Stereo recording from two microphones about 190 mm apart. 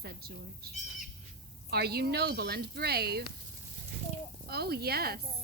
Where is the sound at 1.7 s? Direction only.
55° right (ahead or behind).